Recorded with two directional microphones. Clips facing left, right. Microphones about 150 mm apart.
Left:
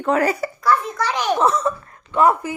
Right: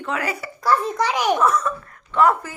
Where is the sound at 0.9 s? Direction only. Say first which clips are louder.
Right 1 dB; 10° right (ahead or behind).